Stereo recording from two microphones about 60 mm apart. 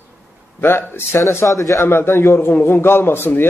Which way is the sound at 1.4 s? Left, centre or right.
Left.